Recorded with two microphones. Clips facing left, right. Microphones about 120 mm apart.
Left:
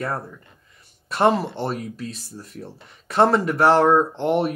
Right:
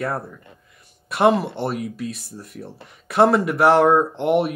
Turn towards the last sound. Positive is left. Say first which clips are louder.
# right 2 dB
turn(degrees=-5)  # may be behind; listen again after turning